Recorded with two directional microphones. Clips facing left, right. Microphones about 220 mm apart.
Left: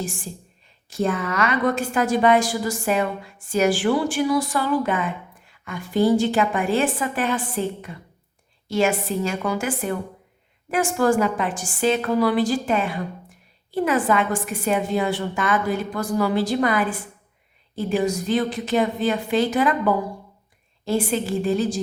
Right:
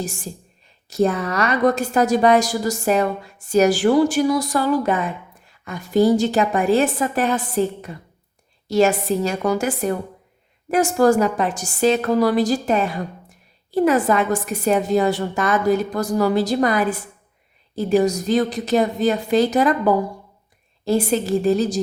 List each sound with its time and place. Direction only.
0.9 s a woman's voice: 40° right (ahead or behind)